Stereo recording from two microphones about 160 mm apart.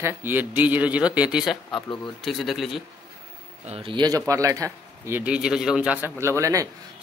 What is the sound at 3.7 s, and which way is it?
Speech, 35° right (ahead or behind).